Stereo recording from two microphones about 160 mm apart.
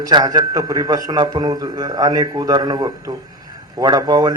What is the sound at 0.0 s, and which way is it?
A man's voice, 25° right (ahead or behind).